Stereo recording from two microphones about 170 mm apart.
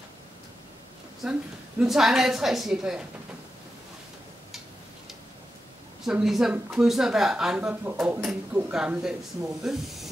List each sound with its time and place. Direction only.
1.2 s a woman's voice: 5° right (ahead or behind)
6.0 s a woman's voice: centre (ahead or behind)